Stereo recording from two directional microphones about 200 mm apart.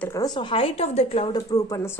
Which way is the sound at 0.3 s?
25° left (ahead or behind).